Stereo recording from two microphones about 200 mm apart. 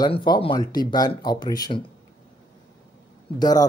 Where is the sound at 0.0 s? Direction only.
20° left (ahead or behind).